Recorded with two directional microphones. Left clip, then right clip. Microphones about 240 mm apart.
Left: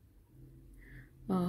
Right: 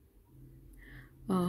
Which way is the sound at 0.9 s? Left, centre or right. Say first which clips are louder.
Right 2 dB; centre.